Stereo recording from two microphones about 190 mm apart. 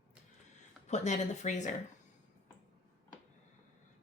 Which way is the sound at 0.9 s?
35° left (ahead or behind).